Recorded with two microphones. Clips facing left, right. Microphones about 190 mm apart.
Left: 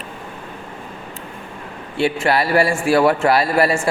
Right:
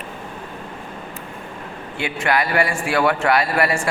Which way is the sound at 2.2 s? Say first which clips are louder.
Left 1 dB; 30° left (ahead or behind).